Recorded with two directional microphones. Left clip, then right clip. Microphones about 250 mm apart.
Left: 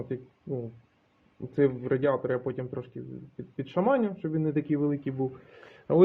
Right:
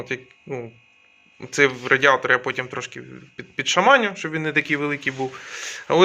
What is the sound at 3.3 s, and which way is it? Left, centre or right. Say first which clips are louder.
A man's voice: right 11 dB; centre.